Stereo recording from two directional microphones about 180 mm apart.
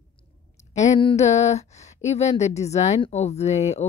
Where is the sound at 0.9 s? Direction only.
30° left (ahead or behind).